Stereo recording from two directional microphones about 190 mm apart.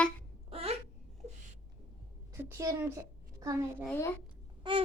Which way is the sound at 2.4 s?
15° right (ahead or behind).